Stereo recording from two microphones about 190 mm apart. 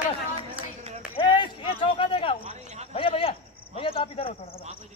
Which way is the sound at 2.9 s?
30° left (ahead or behind).